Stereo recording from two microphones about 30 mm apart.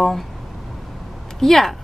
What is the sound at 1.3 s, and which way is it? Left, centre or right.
Speech, centre.